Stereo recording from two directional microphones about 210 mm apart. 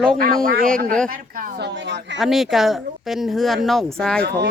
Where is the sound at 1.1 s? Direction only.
45° right (ahead or behind).